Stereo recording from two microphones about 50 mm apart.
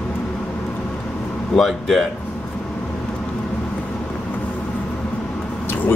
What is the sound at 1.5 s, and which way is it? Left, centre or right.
Speech, centre.